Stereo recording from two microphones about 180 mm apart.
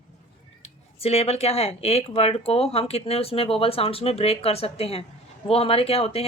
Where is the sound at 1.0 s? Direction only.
35° left (ahead or behind).